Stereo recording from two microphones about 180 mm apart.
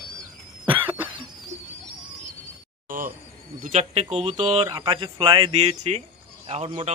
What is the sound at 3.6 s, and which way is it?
Speech, 40° right (ahead or behind).